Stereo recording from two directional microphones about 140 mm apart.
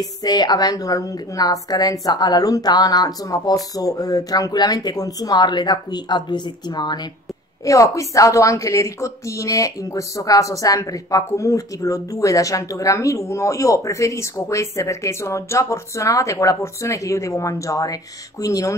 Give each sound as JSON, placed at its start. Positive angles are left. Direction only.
{"t": 0.0, "sound": "a woman's voice", "side_deg": 30}